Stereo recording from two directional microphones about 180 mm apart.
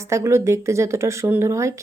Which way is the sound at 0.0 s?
15° right (ahead or behind).